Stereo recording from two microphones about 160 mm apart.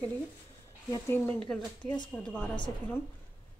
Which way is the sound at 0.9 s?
15° left (ahead or behind).